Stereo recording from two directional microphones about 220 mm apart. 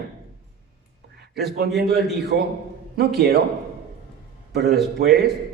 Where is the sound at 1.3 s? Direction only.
45° right (ahead or behind).